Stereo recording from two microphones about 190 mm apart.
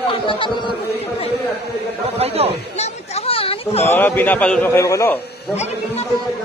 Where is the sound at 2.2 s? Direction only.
30° right (ahead or behind).